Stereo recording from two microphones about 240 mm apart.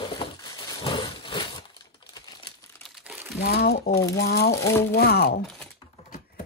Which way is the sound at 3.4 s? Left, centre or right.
Left.